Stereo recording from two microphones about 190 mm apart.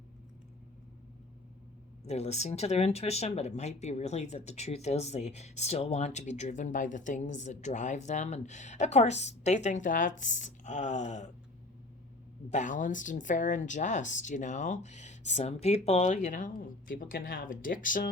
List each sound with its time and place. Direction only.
2.0 s speech: 35° left (ahead or behind)
12.5 s speech: 40° left (ahead or behind)